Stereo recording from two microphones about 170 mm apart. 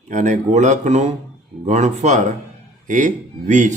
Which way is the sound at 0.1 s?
45° right (ahead or behind).